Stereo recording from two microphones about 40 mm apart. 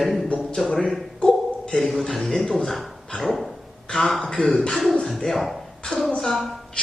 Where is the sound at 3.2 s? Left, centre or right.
Centre.